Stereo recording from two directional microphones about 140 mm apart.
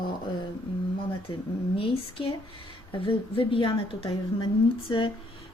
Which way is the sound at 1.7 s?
40° left (ahead or behind).